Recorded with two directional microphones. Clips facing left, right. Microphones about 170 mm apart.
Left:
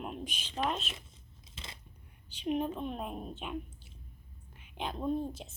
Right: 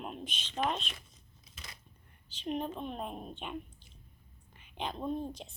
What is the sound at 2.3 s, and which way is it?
A woman's voice, 5° left (ahead or behind).